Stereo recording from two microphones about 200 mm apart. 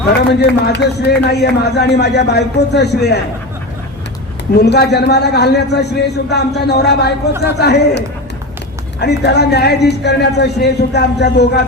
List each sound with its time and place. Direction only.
0.6 s a man's voice: 55° left (ahead or behind)
4.6 s a man's voice: 55° left (ahead or behind)